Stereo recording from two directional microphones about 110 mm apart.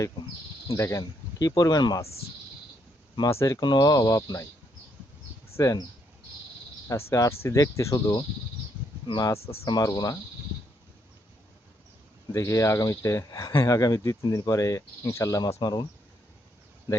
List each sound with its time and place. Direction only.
0.8 s speech: 30° left (ahead or behind)
3.2 s speech: 25° left (ahead or behind)
3.6 s speech: 40° left (ahead or behind)
5.5 s speech: 30° left (ahead or behind)
6.8 s speech: 30° left (ahead or behind)
12.3 s speech: 30° left (ahead or behind)
15.6 s speech: 40° left (ahead or behind)